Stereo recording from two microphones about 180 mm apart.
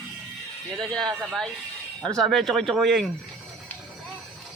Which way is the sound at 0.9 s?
5° left (ahead or behind).